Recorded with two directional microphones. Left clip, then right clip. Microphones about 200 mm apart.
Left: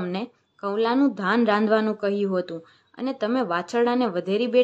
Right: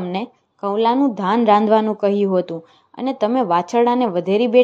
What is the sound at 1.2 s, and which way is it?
A woman's voice, 15° right (ahead or behind).